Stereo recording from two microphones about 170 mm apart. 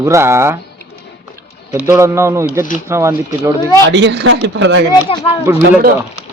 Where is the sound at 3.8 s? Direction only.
90° right.